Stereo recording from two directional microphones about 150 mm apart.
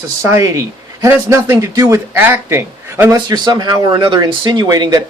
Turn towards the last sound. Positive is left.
turn(degrees=-25)  # may be behind; listen again after turning